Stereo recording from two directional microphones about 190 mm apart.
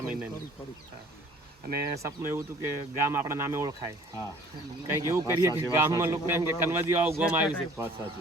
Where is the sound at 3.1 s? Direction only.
15° right (ahead or behind).